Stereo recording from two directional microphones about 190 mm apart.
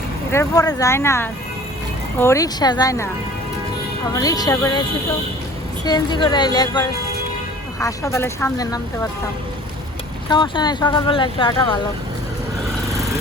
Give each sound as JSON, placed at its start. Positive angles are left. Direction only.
{"t": 0.3, "sound": "speech", "side_deg": 15}
{"t": 4.1, "sound": "speech", "side_deg": 20}
{"t": 5.8, "sound": "speech", "side_deg": 20}
{"t": 10.2, "sound": "speech", "side_deg": 25}